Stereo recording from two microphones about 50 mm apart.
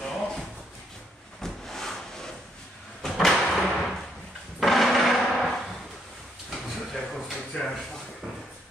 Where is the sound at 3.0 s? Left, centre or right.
Centre.